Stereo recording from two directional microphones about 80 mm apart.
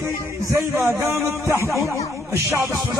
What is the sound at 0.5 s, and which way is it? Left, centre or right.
Speech, right.